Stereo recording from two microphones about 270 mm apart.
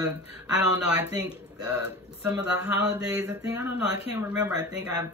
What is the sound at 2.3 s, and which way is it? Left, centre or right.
Speech, centre.